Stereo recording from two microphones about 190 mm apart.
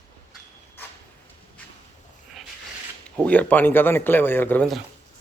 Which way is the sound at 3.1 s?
5° left (ahead or behind).